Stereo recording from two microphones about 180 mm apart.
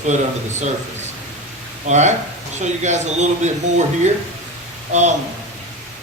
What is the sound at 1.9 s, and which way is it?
A man's voice, 40° right (ahead or behind).